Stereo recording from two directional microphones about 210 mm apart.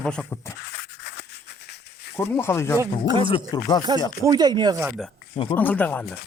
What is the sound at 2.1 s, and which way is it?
Speech, 10° left (ahead or behind).